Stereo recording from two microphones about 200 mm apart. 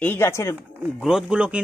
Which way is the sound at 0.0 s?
10° left (ahead or behind).